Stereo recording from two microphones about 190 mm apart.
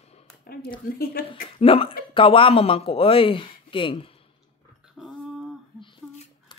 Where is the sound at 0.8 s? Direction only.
50° left (ahead or behind).